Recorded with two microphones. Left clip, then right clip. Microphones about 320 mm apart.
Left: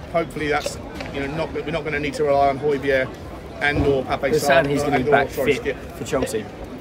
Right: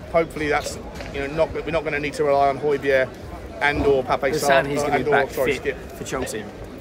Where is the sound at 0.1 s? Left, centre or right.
Centre.